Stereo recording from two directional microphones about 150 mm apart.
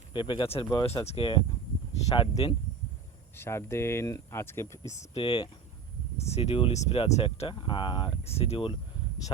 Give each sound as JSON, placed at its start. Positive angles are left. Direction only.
{"t": 0.1, "sound": "speech", "side_deg": 30}
{"t": 3.3, "sound": "speech", "side_deg": 15}
{"t": 4.9, "sound": "speech", "side_deg": 50}
{"t": 5.2, "sound": "speech", "side_deg": 35}